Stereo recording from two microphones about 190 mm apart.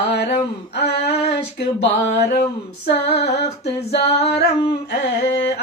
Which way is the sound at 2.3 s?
60° left (ahead or behind).